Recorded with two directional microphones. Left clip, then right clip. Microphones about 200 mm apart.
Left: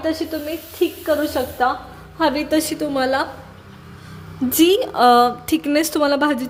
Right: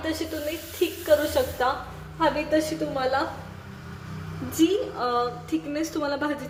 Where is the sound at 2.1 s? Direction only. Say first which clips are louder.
Left 5 dB; 55° left (ahead or behind).